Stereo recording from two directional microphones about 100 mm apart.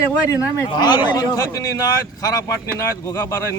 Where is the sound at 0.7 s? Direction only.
45° left (ahead or behind).